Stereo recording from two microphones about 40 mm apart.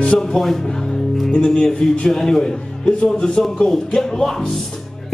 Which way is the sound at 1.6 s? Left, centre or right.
Centre.